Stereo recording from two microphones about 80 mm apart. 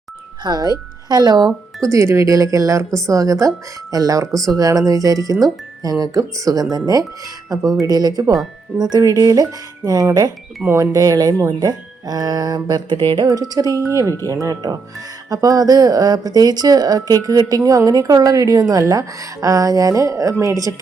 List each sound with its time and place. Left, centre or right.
0.4 s speech: right
1.8 s speech: right
13.2 s speech: right
14.4 s speech: right